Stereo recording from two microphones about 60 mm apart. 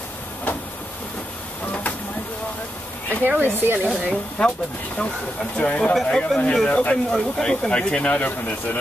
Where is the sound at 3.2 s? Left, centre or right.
Right.